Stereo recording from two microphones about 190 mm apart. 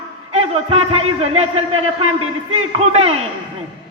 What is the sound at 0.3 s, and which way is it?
A man's voice, 35° right (ahead or behind).